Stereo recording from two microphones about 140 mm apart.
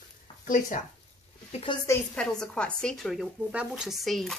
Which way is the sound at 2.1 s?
5° left (ahead or behind).